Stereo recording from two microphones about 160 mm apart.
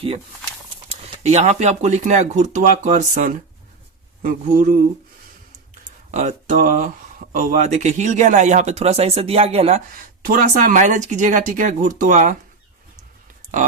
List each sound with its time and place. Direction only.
0.9 s a man's voice: 40° right (ahead or behind)
6.1 s speech: 50° right (ahead or behind)
10.2 s speech: 60° right (ahead or behind)